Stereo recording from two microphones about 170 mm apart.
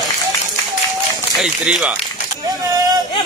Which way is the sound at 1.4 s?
5° right (ahead or behind).